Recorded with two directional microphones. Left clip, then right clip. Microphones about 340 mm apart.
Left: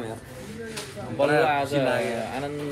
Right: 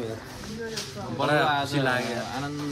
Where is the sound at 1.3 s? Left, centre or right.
Centre.